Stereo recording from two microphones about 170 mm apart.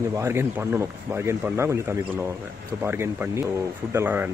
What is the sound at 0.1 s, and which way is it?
A man's voice, 15° right (ahead or behind).